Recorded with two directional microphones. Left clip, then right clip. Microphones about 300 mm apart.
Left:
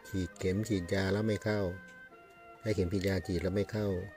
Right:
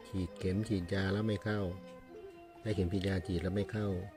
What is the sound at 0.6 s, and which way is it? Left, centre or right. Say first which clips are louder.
Speech: left 3 dB; left.